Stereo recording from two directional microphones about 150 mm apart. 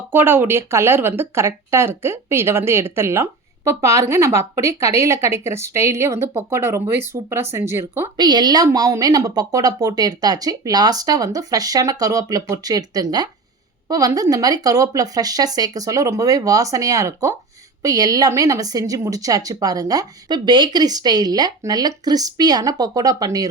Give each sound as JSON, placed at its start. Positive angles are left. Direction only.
{"t": 0.1, "sound": "speech", "side_deg": -15}
{"t": 8.1, "sound": "a woman's voice", "side_deg": -30}